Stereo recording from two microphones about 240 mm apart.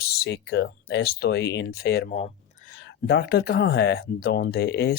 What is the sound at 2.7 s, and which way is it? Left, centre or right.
Speech, left.